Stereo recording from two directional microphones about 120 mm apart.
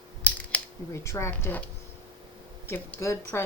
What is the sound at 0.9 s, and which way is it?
Speech, 25° left (ahead or behind).